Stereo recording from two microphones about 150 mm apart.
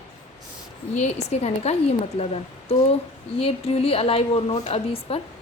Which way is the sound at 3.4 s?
40° left (ahead or behind).